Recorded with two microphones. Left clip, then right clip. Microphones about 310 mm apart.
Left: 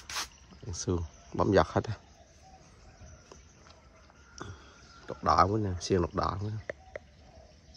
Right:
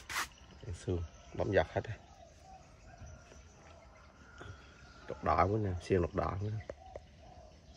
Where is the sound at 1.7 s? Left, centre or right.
Left.